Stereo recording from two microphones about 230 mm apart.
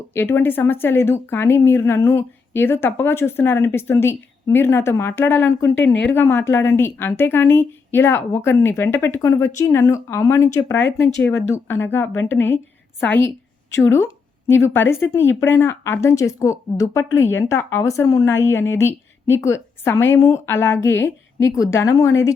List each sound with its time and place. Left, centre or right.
0.1 s a woman's voice: centre